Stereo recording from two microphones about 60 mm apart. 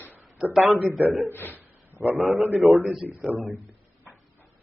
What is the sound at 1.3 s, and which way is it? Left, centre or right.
Speech, left.